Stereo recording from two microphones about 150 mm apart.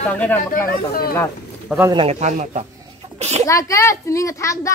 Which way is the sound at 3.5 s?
20° left (ahead or behind).